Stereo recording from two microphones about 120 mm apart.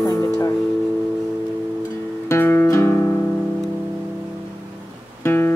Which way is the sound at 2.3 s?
20° left (ahead or behind).